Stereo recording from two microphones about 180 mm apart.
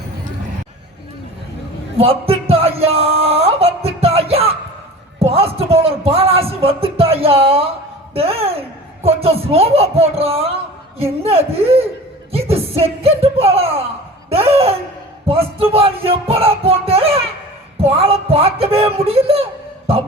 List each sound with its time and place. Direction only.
2.0 s music: 30° right (ahead or behind)
8.1 s speech: 35° right (ahead or behind)
12.3 s a sound: 35° right (ahead or behind)
14.3 s speech: 35° right (ahead or behind)
15.3 s music: 35° right (ahead or behind)
17.7 s speech: 30° right (ahead or behind)